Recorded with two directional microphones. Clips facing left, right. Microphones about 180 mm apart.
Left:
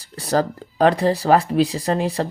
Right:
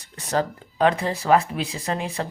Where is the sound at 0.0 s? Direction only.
35° left (ahead or behind).